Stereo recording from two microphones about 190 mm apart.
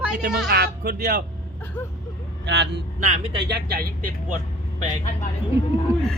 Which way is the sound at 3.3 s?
60° right (ahead or behind).